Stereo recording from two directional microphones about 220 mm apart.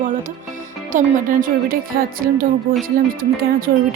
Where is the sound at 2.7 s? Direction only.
40° right (ahead or behind).